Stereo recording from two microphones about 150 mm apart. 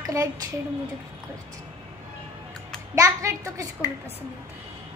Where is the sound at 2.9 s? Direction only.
20° right (ahead or behind).